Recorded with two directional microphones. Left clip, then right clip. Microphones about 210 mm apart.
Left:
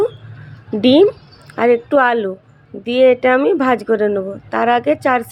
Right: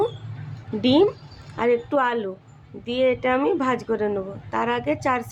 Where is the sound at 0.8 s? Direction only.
25° left (ahead or behind).